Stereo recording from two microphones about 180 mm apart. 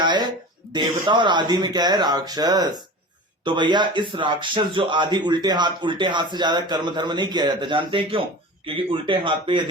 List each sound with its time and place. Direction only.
0.0 s speech: 25° right (ahead or behind)